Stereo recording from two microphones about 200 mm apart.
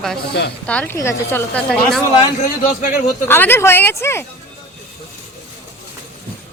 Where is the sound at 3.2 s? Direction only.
10° left (ahead or behind).